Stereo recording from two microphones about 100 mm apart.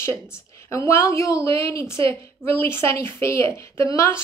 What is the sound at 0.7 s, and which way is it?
A woman's voice, 30° left (ahead or behind).